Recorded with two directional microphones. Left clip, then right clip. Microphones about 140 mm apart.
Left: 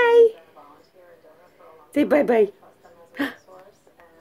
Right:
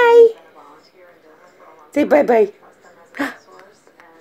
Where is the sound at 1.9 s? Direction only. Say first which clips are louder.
Right 5 dB; 20° left (ahead or behind).